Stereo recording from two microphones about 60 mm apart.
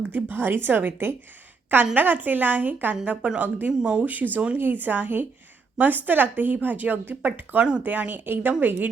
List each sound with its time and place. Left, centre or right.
0.1 s speech: right
3.7 s speech: centre
4.0 s speech: right